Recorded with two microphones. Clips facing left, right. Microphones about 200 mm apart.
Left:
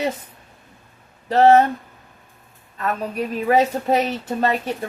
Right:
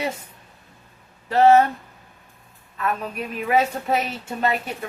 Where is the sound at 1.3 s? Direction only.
35° left (ahead or behind).